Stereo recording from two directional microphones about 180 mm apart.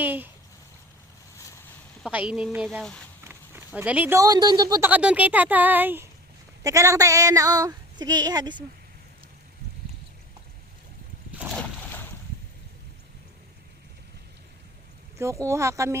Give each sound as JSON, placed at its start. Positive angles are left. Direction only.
{"t": 0.0, "sound": "speech", "side_deg": -10}
{"t": 2.0, "sound": "speech", "side_deg": -5}
{"t": 3.2, "sound": "speech", "side_deg": -10}
{"t": 4.9, "sound": "a woman's voice", "side_deg": -10}
{"t": 11.4, "sound": "a sound", "side_deg": -5}
{"t": 15.2, "sound": "a woman's voice", "side_deg": -15}